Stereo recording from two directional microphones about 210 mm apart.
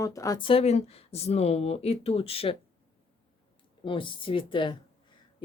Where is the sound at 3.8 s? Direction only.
25° left (ahead or behind).